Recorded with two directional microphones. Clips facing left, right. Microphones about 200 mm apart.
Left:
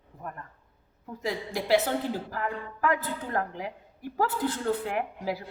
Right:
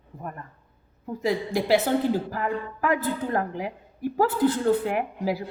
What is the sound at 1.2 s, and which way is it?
A woman's voice, 10° right (ahead or behind).